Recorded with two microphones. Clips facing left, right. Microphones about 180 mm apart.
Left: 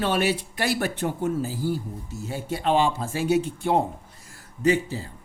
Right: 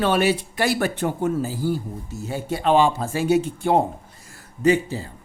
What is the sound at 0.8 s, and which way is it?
Speech, 90° right.